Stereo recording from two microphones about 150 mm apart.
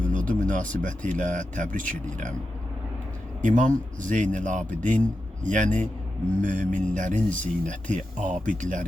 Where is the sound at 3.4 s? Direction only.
55° right (ahead or behind).